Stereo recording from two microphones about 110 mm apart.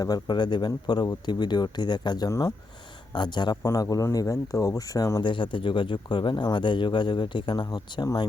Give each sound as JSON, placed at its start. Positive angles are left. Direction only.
{"t": 0.0, "sound": "speech", "side_deg": 40}
{"t": 5.2, "sound": "speech", "side_deg": 50}